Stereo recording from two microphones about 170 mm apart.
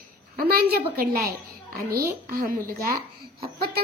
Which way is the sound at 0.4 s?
60° right (ahead or behind).